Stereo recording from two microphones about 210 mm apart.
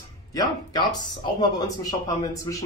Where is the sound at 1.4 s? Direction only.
15° left (ahead or behind).